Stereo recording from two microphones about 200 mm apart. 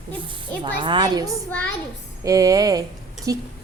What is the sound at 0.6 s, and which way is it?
A woman's voice, 25° right (ahead or behind).